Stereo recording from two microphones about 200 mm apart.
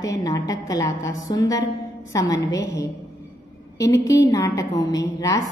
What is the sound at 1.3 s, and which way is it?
Music, 20° left (ahead or behind).